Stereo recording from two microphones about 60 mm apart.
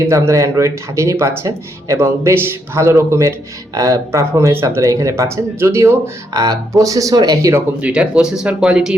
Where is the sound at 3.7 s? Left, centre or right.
Right.